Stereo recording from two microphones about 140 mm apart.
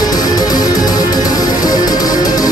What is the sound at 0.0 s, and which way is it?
Music, 25° left (ahead or behind).